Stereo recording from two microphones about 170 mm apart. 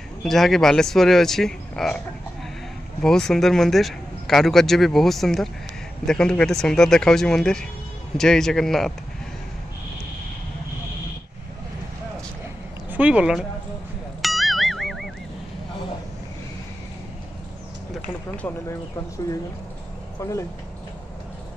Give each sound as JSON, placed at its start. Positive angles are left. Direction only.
{"t": 0.2, "sound": "speech", "side_deg": 0}
{"t": 3.0, "sound": "speech", "side_deg": 5}
{"t": 12.9, "sound": "speech", "side_deg": -10}
{"t": 14.2, "sound": "music", "side_deg": 0}
{"t": 17.9, "sound": "speech", "side_deg": 10}
{"t": 20.2, "sound": "speech", "side_deg": 15}